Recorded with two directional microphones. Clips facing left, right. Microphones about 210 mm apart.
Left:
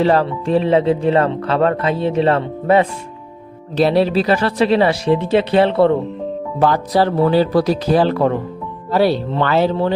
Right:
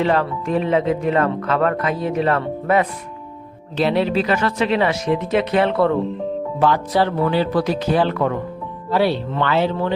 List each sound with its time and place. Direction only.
0.0 s speech: 35° left (ahead or behind)
6.6 s speech: 40° left (ahead or behind)